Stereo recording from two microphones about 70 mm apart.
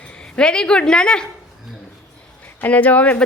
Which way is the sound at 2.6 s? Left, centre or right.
Left.